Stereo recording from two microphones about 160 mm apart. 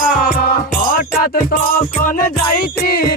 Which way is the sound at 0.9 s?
60° left (ahead or behind).